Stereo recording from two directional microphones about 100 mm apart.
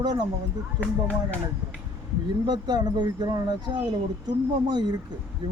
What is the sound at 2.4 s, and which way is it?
Speech, 45° right (ahead or behind).